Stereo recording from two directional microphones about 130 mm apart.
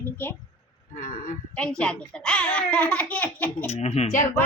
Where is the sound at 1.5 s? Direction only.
5° left (ahead or behind).